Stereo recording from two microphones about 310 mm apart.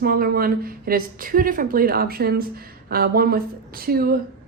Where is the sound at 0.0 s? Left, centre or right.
Right.